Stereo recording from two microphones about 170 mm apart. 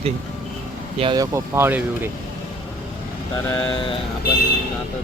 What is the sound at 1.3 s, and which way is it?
Speech, 15° right (ahead or behind).